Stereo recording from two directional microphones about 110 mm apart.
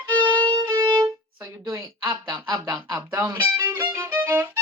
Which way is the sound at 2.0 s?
40° right (ahead or behind).